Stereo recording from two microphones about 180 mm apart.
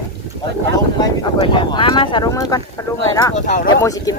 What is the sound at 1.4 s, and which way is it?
Speech, 25° left (ahead or behind).